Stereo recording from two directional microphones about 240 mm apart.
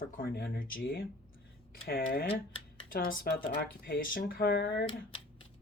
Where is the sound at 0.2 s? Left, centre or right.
Left.